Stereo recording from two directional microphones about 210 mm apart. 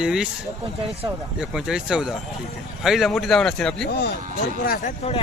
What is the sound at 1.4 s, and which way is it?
Speech, 5° right (ahead or behind).